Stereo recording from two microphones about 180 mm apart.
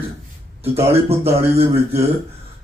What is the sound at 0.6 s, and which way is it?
Speech, 35° right (ahead or behind).